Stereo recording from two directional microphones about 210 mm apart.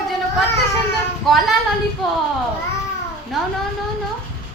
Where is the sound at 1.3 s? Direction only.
Centre (ahead or behind).